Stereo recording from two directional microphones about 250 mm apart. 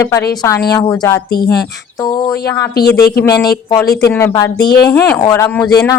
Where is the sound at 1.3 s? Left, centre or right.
Left.